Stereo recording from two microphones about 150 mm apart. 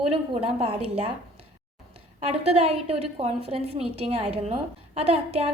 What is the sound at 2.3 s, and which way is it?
A woman's voice, 40° right (ahead or behind).